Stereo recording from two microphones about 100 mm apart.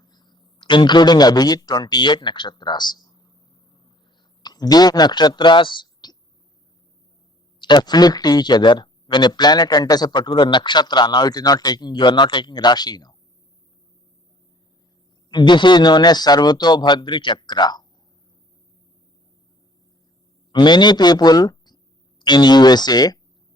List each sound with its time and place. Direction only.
0.0 s a sound: 45° left (ahead or behind)
4.4 s speech: 40° left (ahead or behind)
7.6 s speech: 45° left (ahead or behind)
15.3 s speech: 50° left (ahead or behind)
20.5 s speech: 50° left (ahead or behind)